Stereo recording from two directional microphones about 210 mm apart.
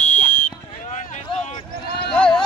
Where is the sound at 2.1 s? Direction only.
5° left (ahead or behind).